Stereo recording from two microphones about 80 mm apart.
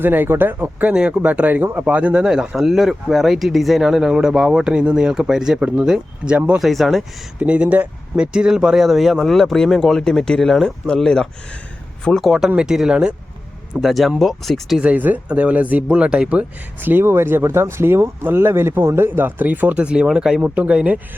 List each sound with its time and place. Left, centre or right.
0.0 s speech: right; by 7.0 s centre
7.3 s speech: centre
12.2 s speech: centre
13.8 s speech: centre
14.8 s speech: centre